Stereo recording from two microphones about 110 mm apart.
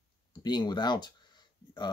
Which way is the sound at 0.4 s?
40° left (ahead or behind).